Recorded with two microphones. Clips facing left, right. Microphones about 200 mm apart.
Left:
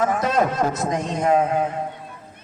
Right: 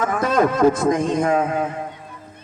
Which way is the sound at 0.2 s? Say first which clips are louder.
Right 4 dB; 50° right (ahead or behind).